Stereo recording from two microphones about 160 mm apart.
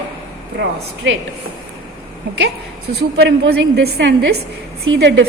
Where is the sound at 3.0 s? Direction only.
85° right.